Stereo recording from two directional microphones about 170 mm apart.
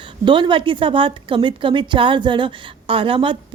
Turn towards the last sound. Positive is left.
turn(degrees=-30)  # may be behind; listen again after turning